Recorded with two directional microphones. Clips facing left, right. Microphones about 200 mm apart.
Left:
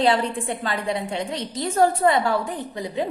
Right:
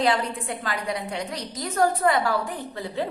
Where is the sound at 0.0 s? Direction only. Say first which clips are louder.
Left 3 dB; 25° left (ahead or behind).